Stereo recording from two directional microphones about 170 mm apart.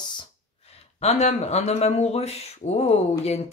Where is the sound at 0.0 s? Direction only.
25° left (ahead or behind).